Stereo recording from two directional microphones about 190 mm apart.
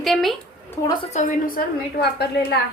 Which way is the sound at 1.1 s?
50° left (ahead or behind).